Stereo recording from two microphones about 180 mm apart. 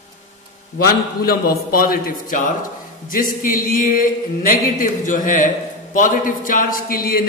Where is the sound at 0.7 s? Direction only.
55° left (ahead or behind).